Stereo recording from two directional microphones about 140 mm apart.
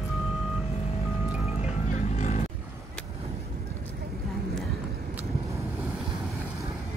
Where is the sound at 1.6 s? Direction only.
55° left (ahead or behind).